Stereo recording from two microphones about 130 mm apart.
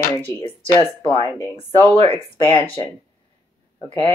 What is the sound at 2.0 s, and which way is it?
Speech, 45° left (ahead or behind).